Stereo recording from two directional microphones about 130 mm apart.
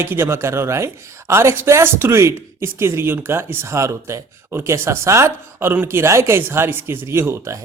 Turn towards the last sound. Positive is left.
turn(degrees=-20)  # may be behind; listen again after turning